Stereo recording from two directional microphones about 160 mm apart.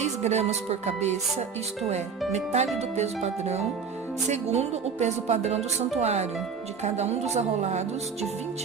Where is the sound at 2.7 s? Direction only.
45° right (ahead or behind).